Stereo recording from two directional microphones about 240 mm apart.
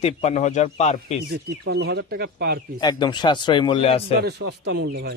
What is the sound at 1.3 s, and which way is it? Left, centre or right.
Speech, right.